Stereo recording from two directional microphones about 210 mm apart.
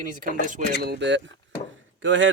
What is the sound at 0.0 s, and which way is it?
Speech, 40° right (ahead or behind).